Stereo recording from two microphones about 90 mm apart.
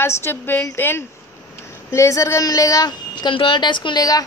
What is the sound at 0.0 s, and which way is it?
A woman's voice, 30° left (ahead or behind).